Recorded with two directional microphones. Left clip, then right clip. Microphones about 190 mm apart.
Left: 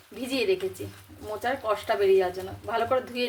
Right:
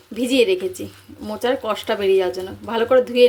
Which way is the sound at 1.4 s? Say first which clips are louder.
Right 6 dB; 45° right (ahead or behind).